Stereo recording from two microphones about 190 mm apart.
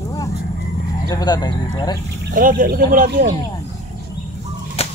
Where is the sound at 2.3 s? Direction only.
45° right (ahead or behind).